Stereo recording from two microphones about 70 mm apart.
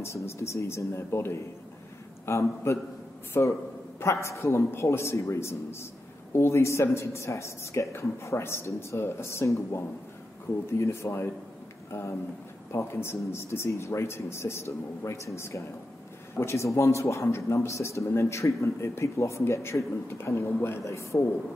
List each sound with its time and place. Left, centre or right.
0.0 s a man's voice: left
20.8 s a man's voice: left